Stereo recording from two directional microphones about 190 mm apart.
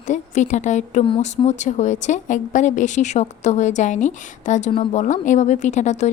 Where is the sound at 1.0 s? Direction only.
30° left (ahead or behind).